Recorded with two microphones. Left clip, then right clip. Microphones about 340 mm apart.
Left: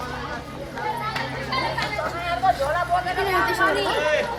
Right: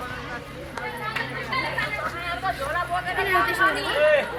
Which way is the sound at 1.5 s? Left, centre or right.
Left.